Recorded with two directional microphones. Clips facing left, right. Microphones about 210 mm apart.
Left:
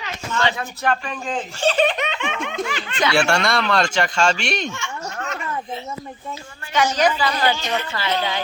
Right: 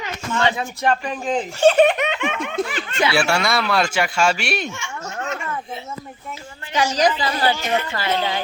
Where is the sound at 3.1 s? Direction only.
5° right (ahead or behind).